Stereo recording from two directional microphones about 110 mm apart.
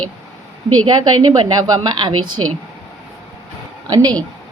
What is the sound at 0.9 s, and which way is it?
A woman's voice, 40° right (ahead or behind).